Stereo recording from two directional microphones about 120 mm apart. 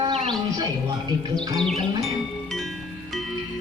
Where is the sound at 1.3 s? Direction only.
5° left (ahead or behind).